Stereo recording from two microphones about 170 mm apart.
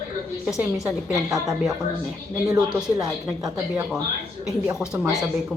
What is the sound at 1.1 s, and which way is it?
Speech, 20° right (ahead or behind).